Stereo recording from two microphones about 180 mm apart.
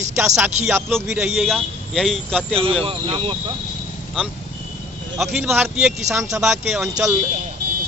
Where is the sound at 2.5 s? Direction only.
30° right (ahead or behind).